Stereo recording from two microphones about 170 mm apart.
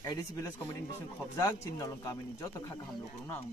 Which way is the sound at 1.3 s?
20° left (ahead or behind).